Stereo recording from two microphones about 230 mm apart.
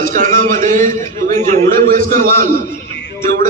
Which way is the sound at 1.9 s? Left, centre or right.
Right.